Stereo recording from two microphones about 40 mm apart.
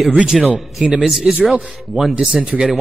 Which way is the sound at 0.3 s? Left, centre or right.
Centre.